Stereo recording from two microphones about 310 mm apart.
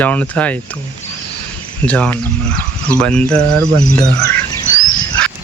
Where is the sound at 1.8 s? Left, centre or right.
Centre.